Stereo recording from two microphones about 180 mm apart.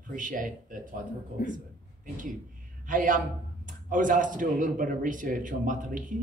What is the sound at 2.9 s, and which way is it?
A man's voice, 45° right (ahead or behind).